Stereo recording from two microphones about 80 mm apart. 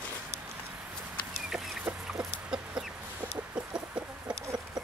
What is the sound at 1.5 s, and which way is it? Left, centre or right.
Chicken, centre.